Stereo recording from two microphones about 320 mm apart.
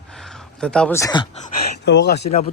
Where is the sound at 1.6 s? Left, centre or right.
Left.